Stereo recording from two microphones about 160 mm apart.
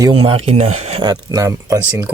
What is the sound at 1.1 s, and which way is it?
Speech, 20° right (ahead or behind).